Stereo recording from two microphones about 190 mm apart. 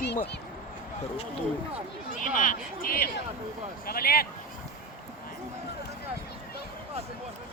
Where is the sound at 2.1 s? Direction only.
45° left (ahead or behind).